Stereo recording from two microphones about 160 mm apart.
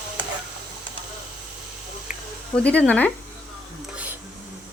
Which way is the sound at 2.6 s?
10° left (ahead or behind).